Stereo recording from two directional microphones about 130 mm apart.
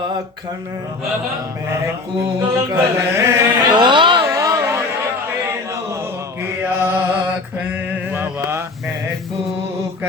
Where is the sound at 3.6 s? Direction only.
35° right (ahead or behind).